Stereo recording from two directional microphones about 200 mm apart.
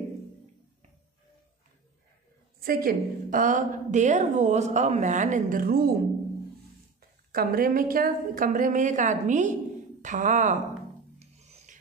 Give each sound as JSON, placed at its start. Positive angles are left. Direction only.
{"t": 2.6, "sound": "a woman's voice", "side_deg": -45}
{"t": 7.0, "sound": "a woman's voice", "side_deg": -45}
{"t": 11.1, "sound": "filing", "side_deg": -35}